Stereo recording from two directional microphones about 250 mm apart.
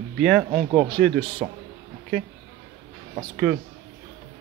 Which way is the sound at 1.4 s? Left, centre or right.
Centre.